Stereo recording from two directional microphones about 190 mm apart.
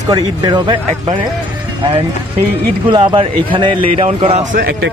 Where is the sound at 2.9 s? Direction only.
25° right (ahead or behind).